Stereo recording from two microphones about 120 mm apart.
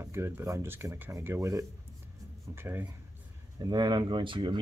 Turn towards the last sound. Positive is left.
turn(degrees=-45)  # may be behind; listen again after turning